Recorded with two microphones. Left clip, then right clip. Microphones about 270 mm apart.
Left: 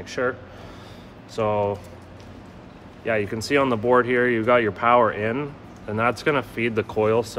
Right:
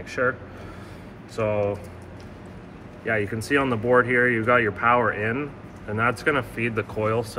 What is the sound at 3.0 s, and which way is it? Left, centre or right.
Speech, left.